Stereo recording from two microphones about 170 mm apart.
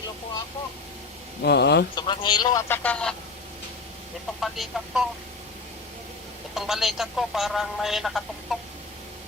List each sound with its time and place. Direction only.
1.4 s speech: 80° left
2.0 s speech: 25° left (ahead or behind); by 3.2 s 5° left (ahead or behind)
4.4 s speech: centre (ahead or behind)
6.5 s speech: centre (ahead or behind)